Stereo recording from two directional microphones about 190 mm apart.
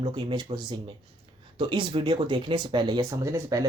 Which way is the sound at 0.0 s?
25° right (ahead or behind).